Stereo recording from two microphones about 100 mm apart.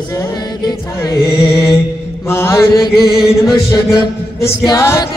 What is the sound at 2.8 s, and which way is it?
Chant, 45° left (ahead or behind).